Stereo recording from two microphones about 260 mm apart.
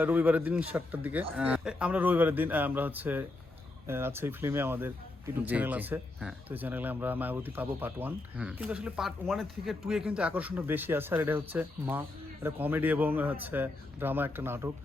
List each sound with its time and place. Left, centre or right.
0.0 s speech: centre